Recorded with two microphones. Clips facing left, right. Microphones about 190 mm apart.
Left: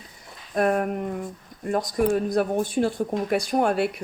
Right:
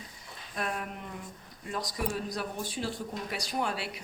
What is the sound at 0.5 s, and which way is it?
Speech, 50° left (ahead or behind).